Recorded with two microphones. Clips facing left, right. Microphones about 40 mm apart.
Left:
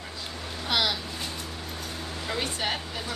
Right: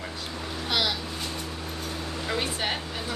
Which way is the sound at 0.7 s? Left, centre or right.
Centre.